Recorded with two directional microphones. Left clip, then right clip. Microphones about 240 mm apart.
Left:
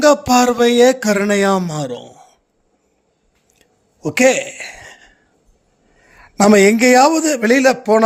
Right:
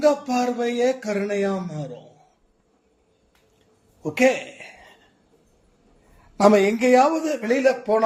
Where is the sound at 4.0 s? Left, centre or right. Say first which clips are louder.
Left 6 dB; left.